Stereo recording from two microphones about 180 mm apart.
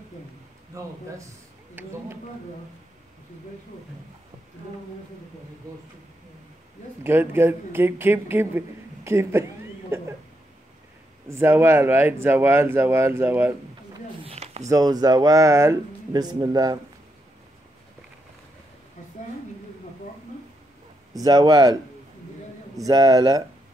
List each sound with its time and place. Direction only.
0.7 s speech: 15° right (ahead or behind)
7.0 s speech: 10° right (ahead or behind)
11.2 s speech: 15° right (ahead or behind)
14.2 s a sound: 35° right (ahead or behind)
14.7 s speech: 20° right (ahead or behind)
21.2 s speech: 20° right (ahead or behind)
22.8 s speech: 20° right (ahead or behind)